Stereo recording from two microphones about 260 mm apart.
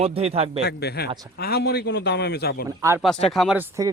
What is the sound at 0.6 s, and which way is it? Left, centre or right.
Speech, left.